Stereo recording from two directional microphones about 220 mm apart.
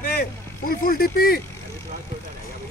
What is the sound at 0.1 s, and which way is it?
Speech, 40° left (ahead or behind).